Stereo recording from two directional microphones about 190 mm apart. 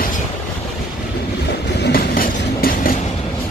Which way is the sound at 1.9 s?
50° left (ahead or behind).